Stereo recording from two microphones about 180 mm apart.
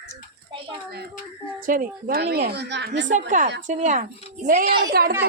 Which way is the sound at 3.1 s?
45° right (ahead or behind).